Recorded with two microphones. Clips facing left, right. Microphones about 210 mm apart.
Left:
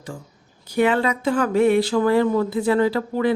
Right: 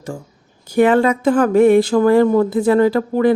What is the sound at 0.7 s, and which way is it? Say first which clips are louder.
Speech: right 6 dB; 45° right (ahead or behind).